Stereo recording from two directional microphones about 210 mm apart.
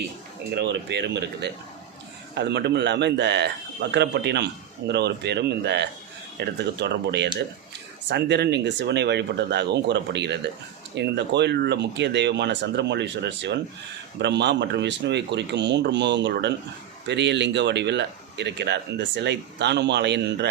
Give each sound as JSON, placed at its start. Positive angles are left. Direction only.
{"t": 0.5, "sound": "speech", "side_deg": -55}